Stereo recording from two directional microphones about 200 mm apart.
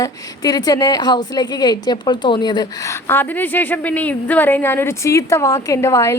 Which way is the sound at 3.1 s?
10° left (ahead or behind).